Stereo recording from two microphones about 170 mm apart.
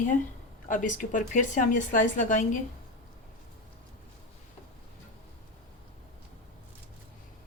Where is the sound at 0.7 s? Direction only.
50° left (ahead or behind).